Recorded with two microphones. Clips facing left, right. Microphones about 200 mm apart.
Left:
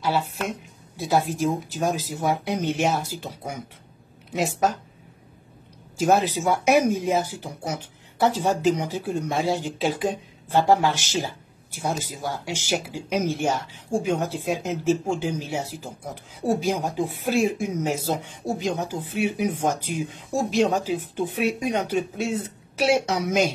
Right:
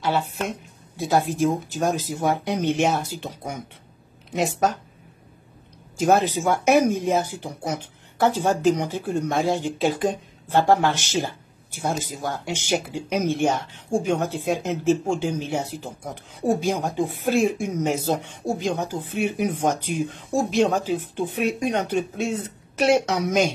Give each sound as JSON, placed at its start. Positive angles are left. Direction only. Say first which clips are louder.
{"t": 0.0, "sound": "a woman's voice", "louder": "right 1 dB", "side_deg": 0}
{"t": 5.9, "sound": "a woman's voice", "louder": "right 1 dB", "side_deg": 0}
{"t": 9.5, "sound": "speech", "louder": "right 2 dB", "side_deg": -50}
{"t": 9.8, "sound": "a woman's voice", "louder": "right 2 dB", "side_deg": 0}